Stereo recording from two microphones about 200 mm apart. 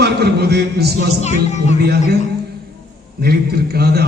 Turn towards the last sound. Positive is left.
turn(degrees=-50)  # may be behind; listen again after turning